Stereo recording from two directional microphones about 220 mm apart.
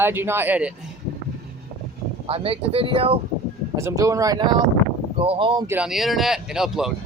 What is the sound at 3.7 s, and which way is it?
Speech, 15° right (ahead or behind).